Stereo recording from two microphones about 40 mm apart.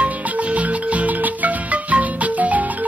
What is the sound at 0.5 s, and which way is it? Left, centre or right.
Marimba, right.